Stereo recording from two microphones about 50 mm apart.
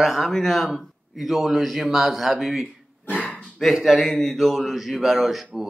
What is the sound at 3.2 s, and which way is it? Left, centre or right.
Dog, left.